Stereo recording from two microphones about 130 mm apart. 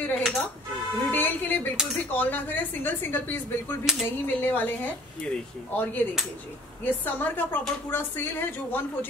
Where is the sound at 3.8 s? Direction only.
5° right (ahead or behind).